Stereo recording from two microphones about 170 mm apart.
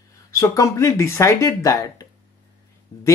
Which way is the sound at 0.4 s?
20° left (ahead or behind).